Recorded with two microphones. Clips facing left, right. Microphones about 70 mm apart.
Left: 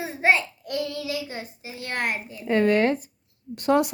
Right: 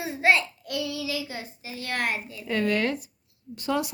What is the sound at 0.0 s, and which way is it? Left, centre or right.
Child singing, left.